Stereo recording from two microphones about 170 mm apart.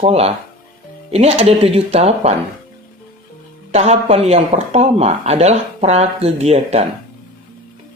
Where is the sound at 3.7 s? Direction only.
40° right (ahead or behind).